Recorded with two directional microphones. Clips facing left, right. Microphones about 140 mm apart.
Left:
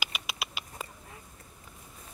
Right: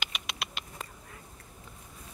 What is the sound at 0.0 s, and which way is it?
Bird, 5° left (ahead or behind).